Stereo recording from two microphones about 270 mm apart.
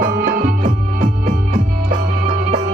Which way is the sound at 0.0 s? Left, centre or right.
Right.